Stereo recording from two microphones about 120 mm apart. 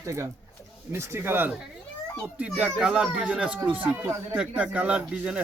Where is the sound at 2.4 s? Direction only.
10° right (ahead or behind).